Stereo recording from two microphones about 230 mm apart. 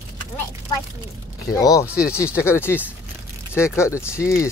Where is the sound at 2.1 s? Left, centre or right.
Centre.